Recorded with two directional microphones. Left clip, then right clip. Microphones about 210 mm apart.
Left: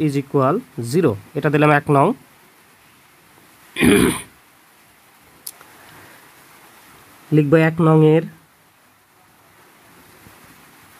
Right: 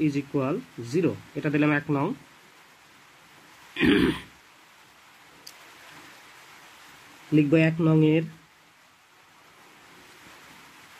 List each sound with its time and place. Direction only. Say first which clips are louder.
0.0 s speech: left 9 dB; 55° left (ahead or behind)
3.7 s throat clearing: left 7 dB; 45° left (ahead or behind)
7.3 s speech: left 7 dB; 55° left (ahead or behind)